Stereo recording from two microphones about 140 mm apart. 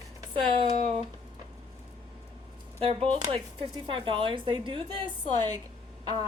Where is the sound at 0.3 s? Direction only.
40° right (ahead or behind).